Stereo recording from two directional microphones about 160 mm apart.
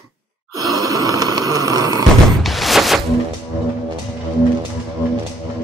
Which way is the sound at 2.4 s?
Centre (ahead or behind).